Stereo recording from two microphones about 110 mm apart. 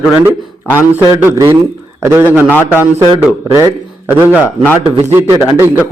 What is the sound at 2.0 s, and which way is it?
Speech, 20° right (ahead or behind).